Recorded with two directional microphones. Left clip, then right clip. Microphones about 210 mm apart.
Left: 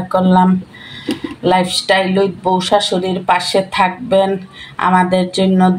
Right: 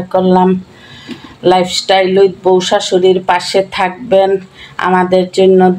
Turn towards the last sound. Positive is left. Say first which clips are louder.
# right 7 dB
turn(degrees=-15)  # may be behind; listen again after turning